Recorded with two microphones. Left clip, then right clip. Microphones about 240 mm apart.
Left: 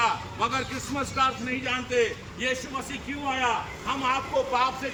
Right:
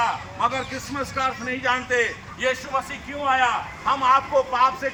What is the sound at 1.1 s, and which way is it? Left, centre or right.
Speech, centre.